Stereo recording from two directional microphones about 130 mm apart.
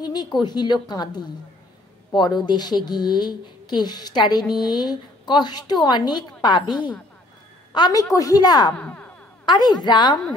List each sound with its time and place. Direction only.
0.0 s a sound: 30° left (ahead or behind)
0.4 s a woman's voice: 35° left (ahead or behind)
7.7 s a woman's voice: 30° left (ahead or behind)
8.7 s music: 10° left (ahead or behind)
9.5 s a woman's voice: 30° left (ahead or behind)